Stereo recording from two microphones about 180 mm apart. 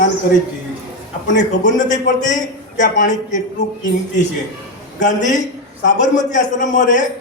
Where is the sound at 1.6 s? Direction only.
45° left (ahead or behind).